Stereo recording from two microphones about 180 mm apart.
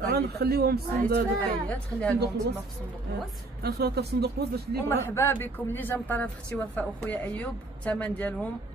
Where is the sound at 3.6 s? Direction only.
60° right (ahead or behind).